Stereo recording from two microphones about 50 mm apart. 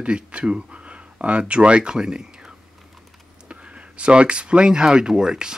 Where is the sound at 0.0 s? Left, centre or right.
Right.